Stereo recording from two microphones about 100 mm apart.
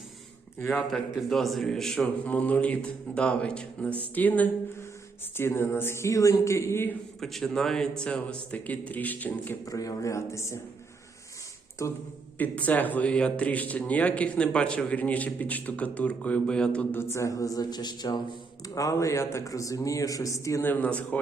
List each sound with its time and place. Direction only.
0.7 s a man's voice: centre (ahead or behind); by 4.4 s 15° left (ahead or behind)
5.4 s speech: 25° left (ahead or behind)
7.2 s a man's voice: 5° left (ahead or behind)
9.6 s speech: 35° left (ahead or behind)
12.4 s a man's voice: 15° left (ahead or behind)
16.9 s speech: 25° left (ahead or behind)
20.7 s a man's voice: 15° left (ahead or behind)